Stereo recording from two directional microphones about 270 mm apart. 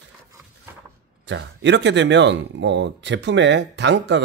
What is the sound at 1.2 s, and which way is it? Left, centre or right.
Speech, right.